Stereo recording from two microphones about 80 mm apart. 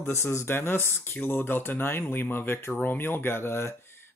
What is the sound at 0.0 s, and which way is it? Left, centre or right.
Speech, left.